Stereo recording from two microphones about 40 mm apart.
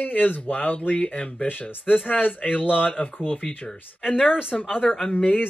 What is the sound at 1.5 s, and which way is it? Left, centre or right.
Speech, left.